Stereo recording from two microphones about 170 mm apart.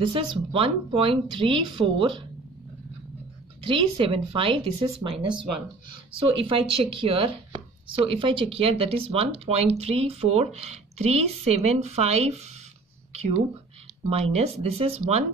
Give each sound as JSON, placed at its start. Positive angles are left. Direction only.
{"t": 0.0, "sound": "speech", "side_deg": -30}
{"t": 3.6, "sound": "speech", "side_deg": -30}
{"t": 6.2, "sound": "speech", "side_deg": -30}
{"t": 14.0, "sound": "speech", "side_deg": -35}